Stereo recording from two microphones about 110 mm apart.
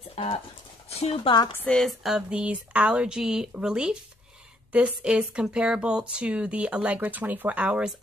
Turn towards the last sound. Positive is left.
turn(degrees=-10)  # may be behind; listen again after turning